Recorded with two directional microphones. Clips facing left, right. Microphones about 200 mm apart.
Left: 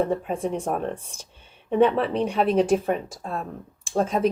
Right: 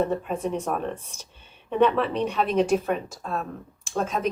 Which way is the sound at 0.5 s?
30° left (ahead or behind).